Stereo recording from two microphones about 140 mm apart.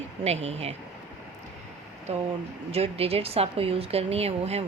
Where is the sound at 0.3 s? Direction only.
50° right (ahead or behind).